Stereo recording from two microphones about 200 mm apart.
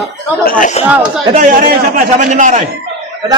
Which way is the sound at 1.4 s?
45° right (ahead or behind).